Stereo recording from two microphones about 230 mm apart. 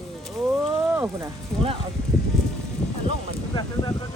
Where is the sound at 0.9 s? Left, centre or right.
Centre.